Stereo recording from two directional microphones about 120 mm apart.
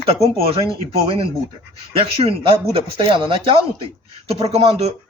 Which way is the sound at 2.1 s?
50° right (ahead or behind).